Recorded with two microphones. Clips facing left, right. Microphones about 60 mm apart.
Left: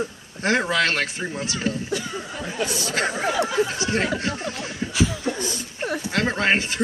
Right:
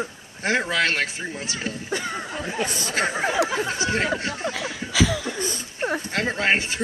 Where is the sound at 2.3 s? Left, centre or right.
Right.